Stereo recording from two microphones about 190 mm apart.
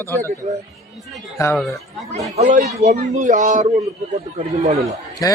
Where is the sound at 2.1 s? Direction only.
35° right (ahead or behind).